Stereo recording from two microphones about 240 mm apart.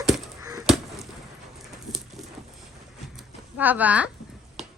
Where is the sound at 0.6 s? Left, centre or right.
Centre.